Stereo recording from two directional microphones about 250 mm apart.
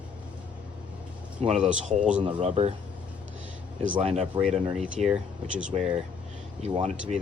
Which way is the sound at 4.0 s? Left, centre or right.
Right.